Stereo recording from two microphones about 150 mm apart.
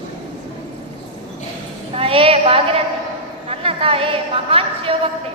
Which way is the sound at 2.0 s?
40° right (ahead or behind).